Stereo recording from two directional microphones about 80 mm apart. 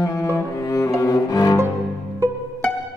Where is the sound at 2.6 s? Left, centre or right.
Centre.